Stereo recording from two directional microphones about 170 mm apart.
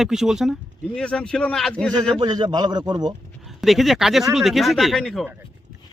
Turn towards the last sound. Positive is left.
turn(degrees=0)  # may be behind; listen again after turning